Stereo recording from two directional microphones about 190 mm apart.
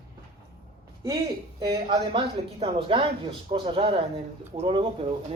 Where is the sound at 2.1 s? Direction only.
25° right (ahead or behind).